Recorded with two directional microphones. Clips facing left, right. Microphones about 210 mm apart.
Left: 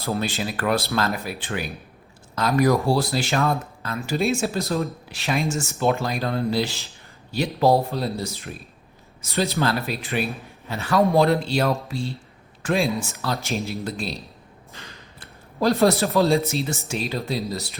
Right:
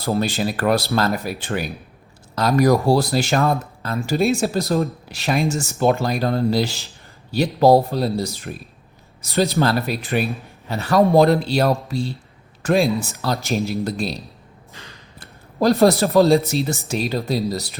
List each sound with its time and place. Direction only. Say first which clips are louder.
0.0 s speech: right 5 dB; 35° right (ahead or behind)
15.2 s speech: right 3 dB; 40° right (ahead or behind)